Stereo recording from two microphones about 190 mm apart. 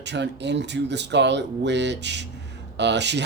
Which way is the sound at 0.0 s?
65° right (ahead or behind).